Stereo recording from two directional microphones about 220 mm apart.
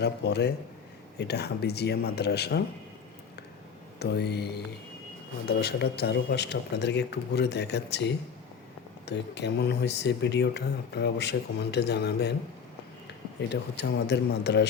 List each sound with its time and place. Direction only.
0.0 s speech: 50° left (ahead or behind)
4.0 s speech: 50° left (ahead or behind)
13.5 s speech: 50° left (ahead or behind)